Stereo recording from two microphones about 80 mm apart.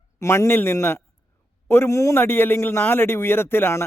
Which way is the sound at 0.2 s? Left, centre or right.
Left.